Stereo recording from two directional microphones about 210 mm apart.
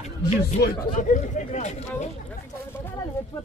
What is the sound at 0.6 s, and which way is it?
Speech, 40° left (ahead or behind).